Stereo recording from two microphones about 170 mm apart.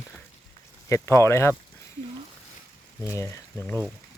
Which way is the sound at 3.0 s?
15° left (ahead or behind).